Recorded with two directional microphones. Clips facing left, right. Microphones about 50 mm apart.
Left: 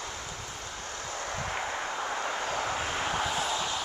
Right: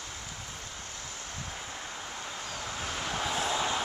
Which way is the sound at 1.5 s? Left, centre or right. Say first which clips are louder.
Left 8 dB; left.